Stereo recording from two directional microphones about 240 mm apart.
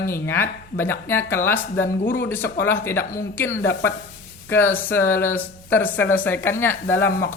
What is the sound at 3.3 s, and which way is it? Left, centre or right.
Speech, centre.